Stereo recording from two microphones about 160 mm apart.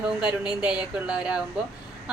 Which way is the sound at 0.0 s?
5° right (ahead or behind).